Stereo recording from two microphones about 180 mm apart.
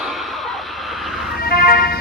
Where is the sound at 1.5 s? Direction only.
55° left (ahead or behind).